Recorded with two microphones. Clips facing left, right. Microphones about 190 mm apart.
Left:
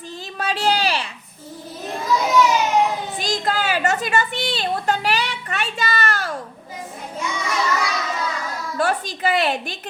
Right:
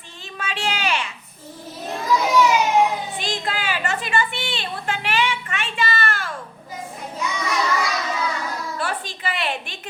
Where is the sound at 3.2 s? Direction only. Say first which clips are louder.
Left 4 dB; 40° left (ahead or behind).